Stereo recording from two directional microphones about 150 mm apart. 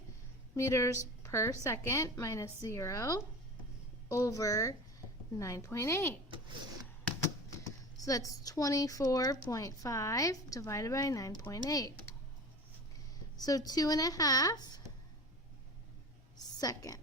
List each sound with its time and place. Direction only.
0.5 s a woman's voice: 20° left (ahead or behind)
7.2 s speech: 20° left (ahead or behind)
13.4 s a woman's voice: 25° left (ahead or behind)
16.6 s a woman's voice: 25° left (ahead or behind)